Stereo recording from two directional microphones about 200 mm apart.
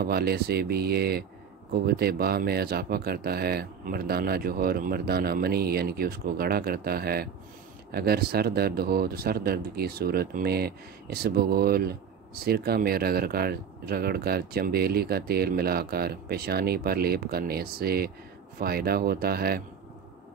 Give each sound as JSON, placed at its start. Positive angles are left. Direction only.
{"t": 0.0, "sound": "speech", "side_deg": -50}